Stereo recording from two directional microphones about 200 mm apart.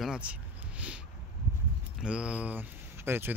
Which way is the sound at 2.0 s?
5° right (ahead or behind).